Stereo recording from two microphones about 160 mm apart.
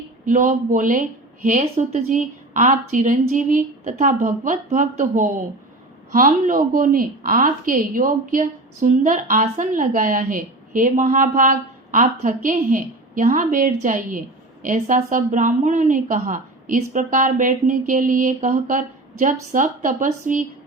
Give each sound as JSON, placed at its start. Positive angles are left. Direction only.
{"t": 0.3, "sound": "a woman's voice", "side_deg": -55}